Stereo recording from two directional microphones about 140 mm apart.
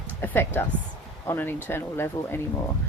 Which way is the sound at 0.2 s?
15° left (ahead or behind).